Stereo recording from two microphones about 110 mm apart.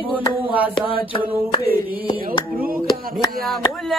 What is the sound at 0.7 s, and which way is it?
Mantra, 50° left (ahead or behind).